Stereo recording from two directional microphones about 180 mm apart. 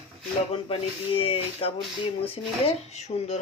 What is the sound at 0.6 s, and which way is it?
Speech, 30° left (ahead or behind).